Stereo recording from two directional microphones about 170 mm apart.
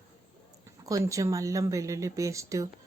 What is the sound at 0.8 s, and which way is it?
A woman's voice, 20° right (ahead or behind).